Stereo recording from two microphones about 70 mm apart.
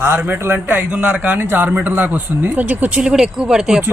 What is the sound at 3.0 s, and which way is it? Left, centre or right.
Speech, centre.